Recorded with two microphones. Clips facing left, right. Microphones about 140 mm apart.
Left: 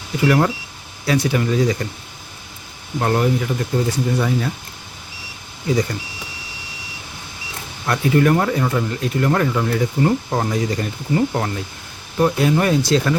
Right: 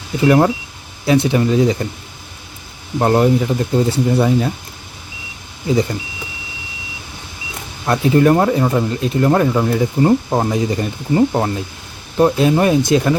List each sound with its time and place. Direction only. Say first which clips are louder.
0.2 s speech: right 4 dB; 25° right (ahead or behind)
3.0 s speech: right 5 dB; 30° right (ahead or behind)
5.6 s speech: right 3 dB; 20° right (ahead or behind)
7.9 s speech: right 4 dB; 25° right (ahead or behind)